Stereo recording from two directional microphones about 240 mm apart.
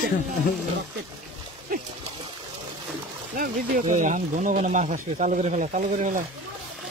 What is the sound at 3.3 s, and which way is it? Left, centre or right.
Speech, right.